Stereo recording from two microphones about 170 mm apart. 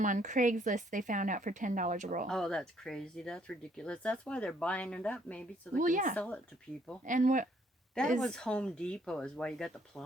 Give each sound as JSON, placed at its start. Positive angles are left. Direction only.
{"t": 0.0, "sound": "speech", "side_deg": -45}
{"t": 2.2, "sound": "speech", "side_deg": 5}
{"t": 5.7, "sound": "speech", "side_deg": -50}
{"t": 6.1, "sound": "speech", "side_deg": 10}
{"t": 7.0, "sound": "speech", "side_deg": -50}
{"t": 8.2, "sound": "speech", "side_deg": 5}